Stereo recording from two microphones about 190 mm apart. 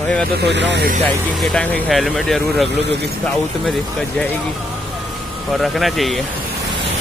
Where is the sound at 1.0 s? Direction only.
5° left (ahead or behind).